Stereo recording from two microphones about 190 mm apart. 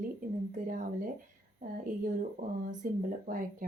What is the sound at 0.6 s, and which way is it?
Speech, 45° right (ahead or behind).